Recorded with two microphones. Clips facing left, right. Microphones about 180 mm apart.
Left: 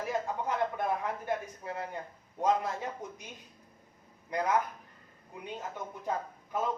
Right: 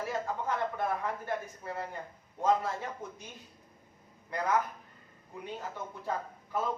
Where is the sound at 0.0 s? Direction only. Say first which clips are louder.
Left 1 dB; 15° left (ahead or behind).